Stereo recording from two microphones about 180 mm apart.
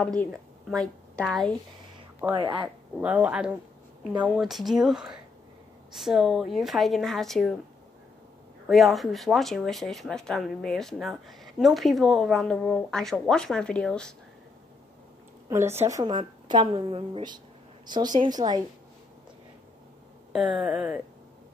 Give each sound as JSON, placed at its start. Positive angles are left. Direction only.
{"t": 0.0, "sound": "a woman's voice", "side_deg": 5}
{"t": 2.3, "sound": "a woman's voice", "side_deg": -30}
{"t": 3.0, "sound": "speech", "side_deg": -5}
{"t": 8.6, "sound": "speech", "side_deg": 0}
{"t": 15.5, "sound": "a woman's voice", "side_deg": -15}
{"t": 20.6, "sound": "speech", "side_deg": -5}